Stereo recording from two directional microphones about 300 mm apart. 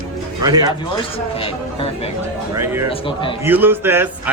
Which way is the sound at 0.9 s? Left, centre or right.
Centre.